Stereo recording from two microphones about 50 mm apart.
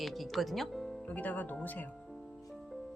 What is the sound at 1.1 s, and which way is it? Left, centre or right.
Speech, left.